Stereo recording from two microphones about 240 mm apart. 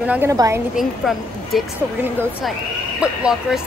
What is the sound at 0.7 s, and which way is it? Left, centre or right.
A woman's voice, centre.